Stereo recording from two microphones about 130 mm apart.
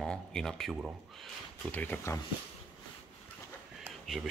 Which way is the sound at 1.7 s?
15° left (ahead or behind).